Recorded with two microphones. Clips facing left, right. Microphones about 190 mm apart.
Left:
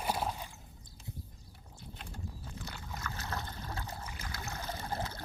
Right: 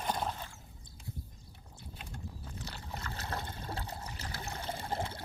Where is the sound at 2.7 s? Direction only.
30° right (ahead or behind).